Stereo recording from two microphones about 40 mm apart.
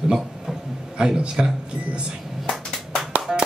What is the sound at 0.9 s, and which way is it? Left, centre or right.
Speech, right.